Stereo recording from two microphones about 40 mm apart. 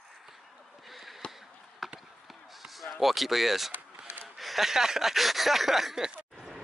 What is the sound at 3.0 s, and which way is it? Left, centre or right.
Speech, centre.